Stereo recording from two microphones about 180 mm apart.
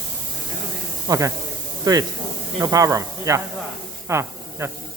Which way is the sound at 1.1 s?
20° right (ahead or behind).